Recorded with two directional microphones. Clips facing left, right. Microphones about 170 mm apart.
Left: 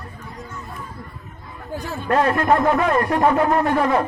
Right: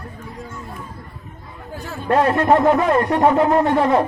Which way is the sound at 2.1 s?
25° right (ahead or behind).